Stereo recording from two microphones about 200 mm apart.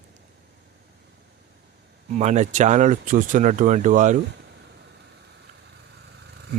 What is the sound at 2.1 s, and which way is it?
Speech, 35° right (ahead or behind).